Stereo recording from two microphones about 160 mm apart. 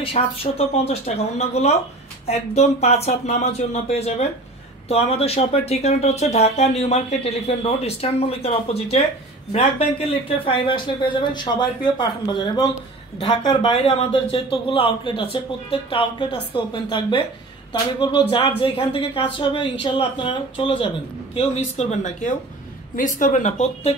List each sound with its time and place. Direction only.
0.0 s speech: 40° left (ahead or behind)
21.4 s speech: 45° left (ahead or behind)